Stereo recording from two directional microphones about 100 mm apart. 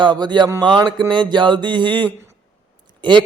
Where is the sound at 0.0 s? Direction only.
50° right (ahead or behind).